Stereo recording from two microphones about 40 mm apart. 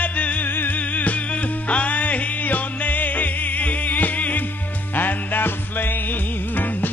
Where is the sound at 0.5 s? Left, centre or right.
Left.